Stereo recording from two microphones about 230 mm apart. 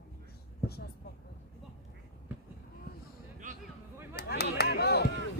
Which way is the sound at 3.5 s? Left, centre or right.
Right.